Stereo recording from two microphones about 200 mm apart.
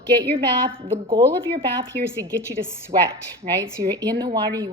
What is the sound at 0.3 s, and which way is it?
Speech, 25° right (ahead or behind).